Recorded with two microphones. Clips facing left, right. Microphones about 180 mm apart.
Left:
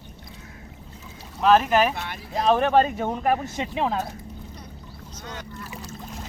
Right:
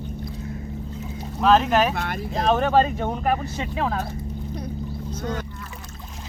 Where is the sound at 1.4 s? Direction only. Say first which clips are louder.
Even; 5° left (ahead or behind).